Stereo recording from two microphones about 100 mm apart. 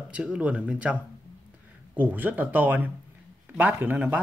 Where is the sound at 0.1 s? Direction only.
10° right (ahead or behind).